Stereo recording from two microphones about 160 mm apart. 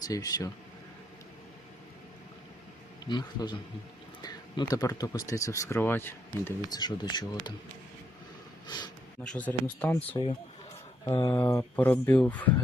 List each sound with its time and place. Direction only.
0.1 s speech: 20° left (ahead or behind)
3.1 s speech: 25° left (ahead or behind)
6.7 s speech: 25° left (ahead or behind)
8.6 s speech: 25° left (ahead or behind)
9.2 s speech: 5° left (ahead or behind)
10.1 s speech: 35° left (ahead or behind)
11.0 s speech: 25° left (ahead or behind)
11.3 s speech: 10° left (ahead or behind)